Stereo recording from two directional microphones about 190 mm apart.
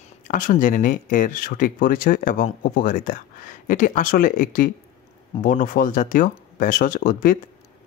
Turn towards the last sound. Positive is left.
turn(degrees=45)  # may be behind; listen again after turning